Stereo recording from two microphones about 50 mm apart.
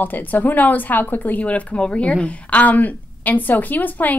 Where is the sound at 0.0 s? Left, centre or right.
Left.